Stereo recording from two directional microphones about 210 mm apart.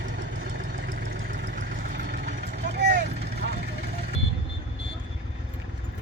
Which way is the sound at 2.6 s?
55° right (ahead or behind).